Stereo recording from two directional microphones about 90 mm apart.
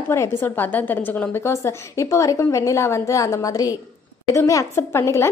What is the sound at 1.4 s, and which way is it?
A woman's voice, 35° left (ahead or behind).